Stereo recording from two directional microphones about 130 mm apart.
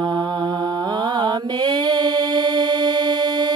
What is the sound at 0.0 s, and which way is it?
Mantra, 35° right (ahead or behind).